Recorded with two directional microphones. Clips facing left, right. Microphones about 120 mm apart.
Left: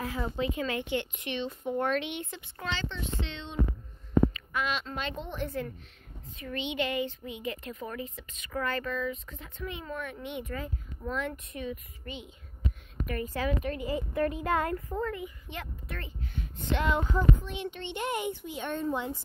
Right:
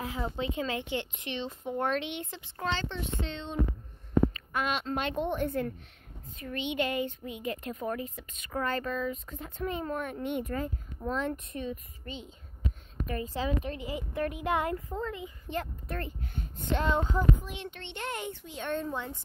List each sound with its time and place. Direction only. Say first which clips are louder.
0.0 s speech: left 2 dB; 20° right (ahead or behind)
2.7 s a woman's voice: even; 50° right (ahead or behind)
8.5 s speech: right 1 dB; 35° right (ahead or behind)
13.0 s speech: left 1 dB; 25° right (ahead or behind)
13.8 s speech: left 6 dB; 10° right (ahead or behind)
15.4 s a woman's voice: right 6 dB; 40° right (ahead or behind)
16.8 s speech: even; 25° right (ahead or behind)
17.6 s a child's voice: left 5 dB; 5° left (ahead or behind)